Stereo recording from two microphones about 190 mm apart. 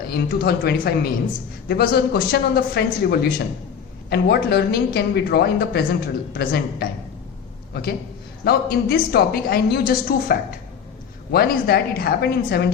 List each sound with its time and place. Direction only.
0.1 s a woman's voice: 55° left (ahead or behind)